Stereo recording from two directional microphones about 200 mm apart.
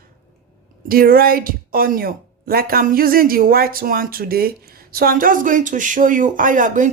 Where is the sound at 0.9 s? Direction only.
50° right (ahead or behind).